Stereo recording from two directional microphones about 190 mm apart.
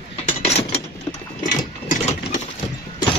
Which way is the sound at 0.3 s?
35° left (ahead or behind).